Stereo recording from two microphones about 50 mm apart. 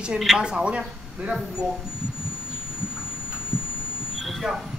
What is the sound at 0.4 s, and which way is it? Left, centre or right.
Speech, centre.